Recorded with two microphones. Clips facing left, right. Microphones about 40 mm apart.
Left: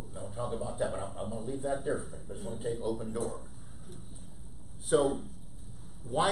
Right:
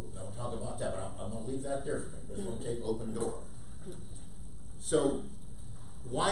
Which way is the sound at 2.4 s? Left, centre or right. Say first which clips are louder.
Left 2 dB; centre.